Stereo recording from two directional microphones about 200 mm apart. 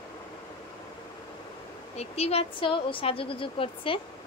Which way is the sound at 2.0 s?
30° left (ahead or behind).